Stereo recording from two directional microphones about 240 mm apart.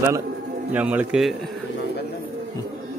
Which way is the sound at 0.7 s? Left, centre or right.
Centre.